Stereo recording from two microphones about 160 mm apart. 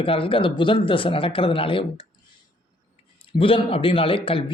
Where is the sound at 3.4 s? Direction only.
35° left (ahead or behind).